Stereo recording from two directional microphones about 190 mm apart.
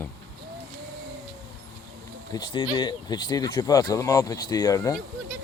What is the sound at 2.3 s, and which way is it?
Speech, 25° left (ahead or behind).